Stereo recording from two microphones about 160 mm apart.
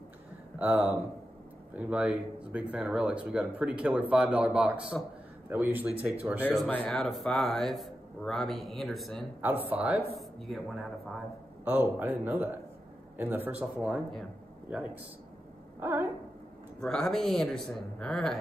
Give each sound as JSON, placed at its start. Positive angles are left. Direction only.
{"t": 0.6, "sound": "speech", "side_deg": -10}
{"t": 6.5, "sound": "a man's voice", "side_deg": 5}
{"t": 9.4, "sound": "a man's voice", "side_deg": -10}
{"t": 11.6, "sound": "speech", "side_deg": -10}
{"t": 15.8, "sound": "speech", "side_deg": -15}
{"t": 16.8, "sound": "a man's voice", "side_deg": 5}